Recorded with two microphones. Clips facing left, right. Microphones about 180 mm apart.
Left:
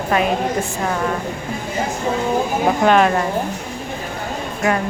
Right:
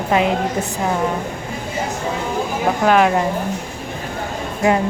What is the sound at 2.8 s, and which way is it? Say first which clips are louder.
Speech: right 1 dB; 10° right (ahead or behind).